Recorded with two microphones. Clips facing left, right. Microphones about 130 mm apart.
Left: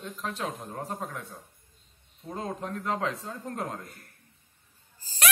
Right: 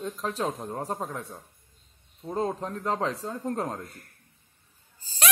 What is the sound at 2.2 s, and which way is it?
A man's voice, 35° right (ahead or behind).